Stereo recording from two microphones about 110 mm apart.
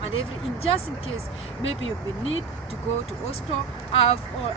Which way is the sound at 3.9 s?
60° left (ahead or behind).